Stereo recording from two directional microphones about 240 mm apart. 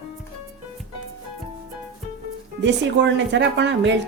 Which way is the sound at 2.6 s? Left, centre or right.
Right.